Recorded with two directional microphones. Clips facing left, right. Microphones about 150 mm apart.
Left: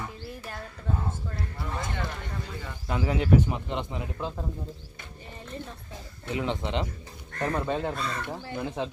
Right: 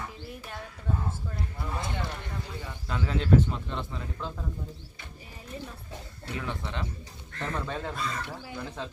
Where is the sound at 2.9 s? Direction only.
10° left (ahead or behind).